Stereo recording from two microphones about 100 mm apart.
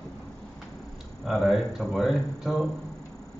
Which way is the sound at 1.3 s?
5° left (ahead or behind).